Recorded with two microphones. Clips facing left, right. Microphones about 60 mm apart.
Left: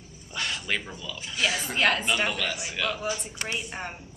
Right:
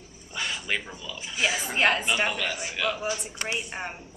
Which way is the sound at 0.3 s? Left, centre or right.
Centre.